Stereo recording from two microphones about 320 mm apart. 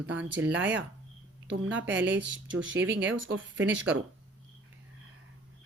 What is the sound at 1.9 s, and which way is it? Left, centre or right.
A woman's voice, right.